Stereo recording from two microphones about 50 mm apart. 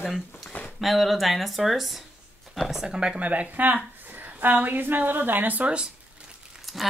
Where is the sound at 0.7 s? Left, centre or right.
Centre.